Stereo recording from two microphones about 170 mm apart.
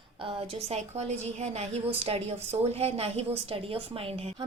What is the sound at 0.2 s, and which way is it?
A woman's voice, 35° right (ahead or behind).